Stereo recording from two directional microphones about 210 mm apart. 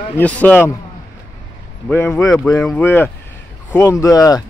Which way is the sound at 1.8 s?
10° left (ahead or behind).